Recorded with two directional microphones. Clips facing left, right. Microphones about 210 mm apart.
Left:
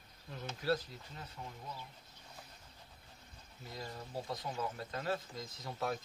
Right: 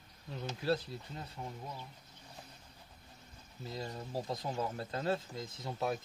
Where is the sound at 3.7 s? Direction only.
25° right (ahead or behind).